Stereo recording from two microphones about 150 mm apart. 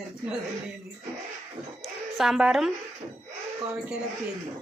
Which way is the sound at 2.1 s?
Centre (ahead or behind).